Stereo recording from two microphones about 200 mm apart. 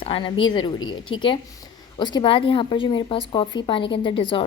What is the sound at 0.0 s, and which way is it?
A woman's voice, 25° left (ahead or behind).